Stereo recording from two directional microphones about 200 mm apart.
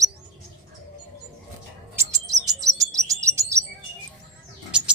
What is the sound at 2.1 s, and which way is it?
Chirp, 15° right (ahead or behind).